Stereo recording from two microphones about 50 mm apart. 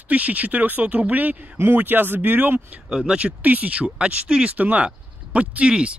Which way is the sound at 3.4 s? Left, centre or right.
Right.